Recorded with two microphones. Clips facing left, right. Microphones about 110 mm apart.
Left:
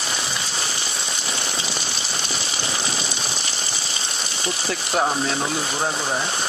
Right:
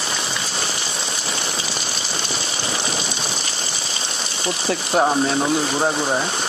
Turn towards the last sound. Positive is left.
turn(degrees=-20)  # may be behind; listen again after turning